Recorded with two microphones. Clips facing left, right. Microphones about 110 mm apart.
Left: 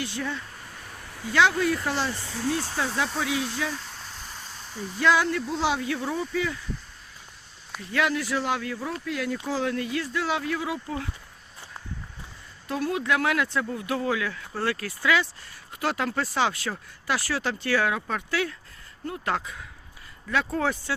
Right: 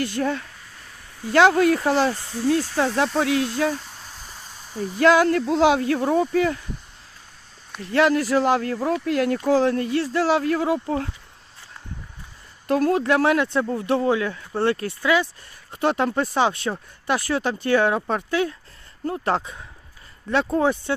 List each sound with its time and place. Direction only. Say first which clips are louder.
0.0 s speech: right 7 dB; 50° right (ahead or behind)
2.7 s speech: right 7 dB; 55° right (ahead or behind)
4.3 s a sound: even; 5° right (ahead or behind)
4.7 s speech: right 6 dB; 50° right (ahead or behind)
7.9 s speech: right 7 dB; 40° right (ahead or behind)
8.9 s speech: right 10 dB; 60° right (ahead or behind)
9.6 s speech: right 7 dB; 40° right (ahead or behind)
12.6 s speech: right 7 dB; 50° right (ahead or behind); by 20.9 s 20° right (ahead or behind)